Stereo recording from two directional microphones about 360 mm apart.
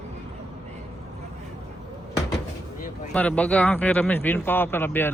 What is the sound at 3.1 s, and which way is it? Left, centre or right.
Speech, centre.